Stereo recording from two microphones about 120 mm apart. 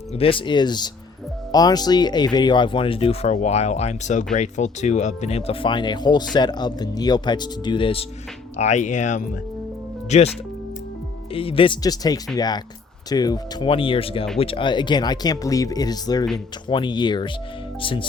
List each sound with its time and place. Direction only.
0.2 s speech: 45° left (ahead or behind)
5.6 s speech: 40° left (ahead or behind)
8.5 s speech: 75° left (ahead or behind)
10.1 s speech: 70° left (ahead or behind)
11.3 s speech: 50° left (ahead or behind)
11.8 s speech: 30° left (ahead or behind)
13.7 s speech: 45° left (ahead or behind)